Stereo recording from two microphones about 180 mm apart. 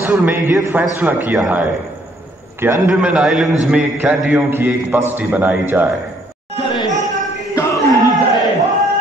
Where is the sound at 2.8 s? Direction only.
5° right (ahead or behind).